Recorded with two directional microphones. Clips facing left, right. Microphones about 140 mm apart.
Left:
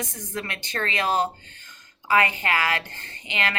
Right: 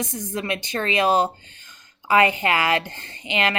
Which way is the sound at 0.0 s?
15° right (ahead or behind).